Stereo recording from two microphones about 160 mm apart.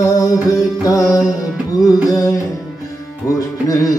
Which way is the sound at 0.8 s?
20° left (ahead or behind).